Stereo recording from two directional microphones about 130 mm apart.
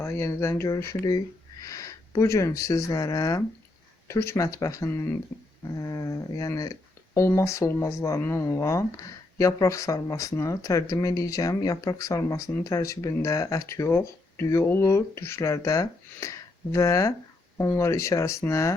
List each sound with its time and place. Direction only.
0.0 s speech: 20° left (ahead or behind)